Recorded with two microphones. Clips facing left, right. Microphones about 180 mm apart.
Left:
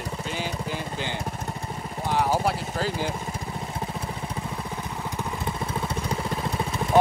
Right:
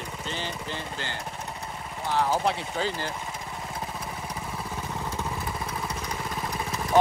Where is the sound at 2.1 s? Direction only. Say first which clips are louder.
Left 1 dB; 10° left (ahead or behind).